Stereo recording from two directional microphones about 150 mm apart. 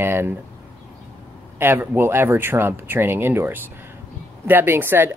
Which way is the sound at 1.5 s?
15° right (ahead or behind).